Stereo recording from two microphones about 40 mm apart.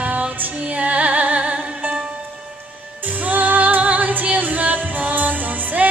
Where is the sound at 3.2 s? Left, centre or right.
Right.